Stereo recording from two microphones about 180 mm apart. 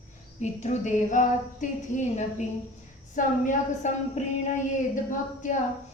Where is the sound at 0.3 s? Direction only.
40° left (ahead or behind).